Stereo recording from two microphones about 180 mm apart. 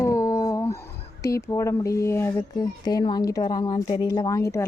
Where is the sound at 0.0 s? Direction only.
15° left (ahead or behind).